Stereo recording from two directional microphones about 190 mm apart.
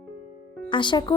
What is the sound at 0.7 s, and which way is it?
Speech, 25° left (ahead or behind).